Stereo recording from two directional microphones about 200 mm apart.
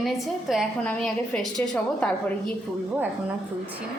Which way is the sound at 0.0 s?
Centre (ahead or behind).